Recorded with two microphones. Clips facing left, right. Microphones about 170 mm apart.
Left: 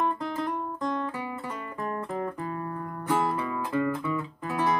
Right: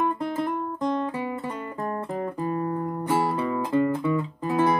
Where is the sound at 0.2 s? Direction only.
20° right (ahead or behind).